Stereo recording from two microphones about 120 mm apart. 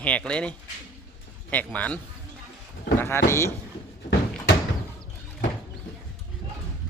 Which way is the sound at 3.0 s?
20° left (ahead or behind).